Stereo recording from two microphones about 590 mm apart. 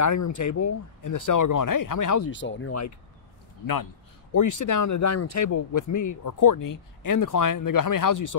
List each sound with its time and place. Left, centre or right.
0.0 s speech: left
4.3 s speech: left